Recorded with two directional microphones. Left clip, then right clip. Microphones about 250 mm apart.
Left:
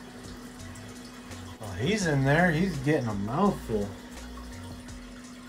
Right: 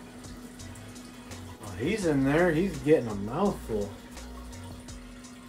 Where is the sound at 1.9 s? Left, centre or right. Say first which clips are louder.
Even; left.